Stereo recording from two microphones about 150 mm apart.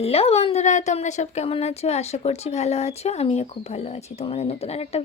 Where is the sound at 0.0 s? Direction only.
40° left (ahead or behind).